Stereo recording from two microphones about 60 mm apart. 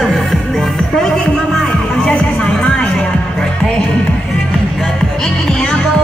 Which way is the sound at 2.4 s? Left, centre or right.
Centre.